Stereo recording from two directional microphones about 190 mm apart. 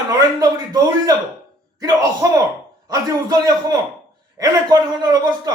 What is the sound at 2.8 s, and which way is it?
A man's voice, 20° right (ahead or behind).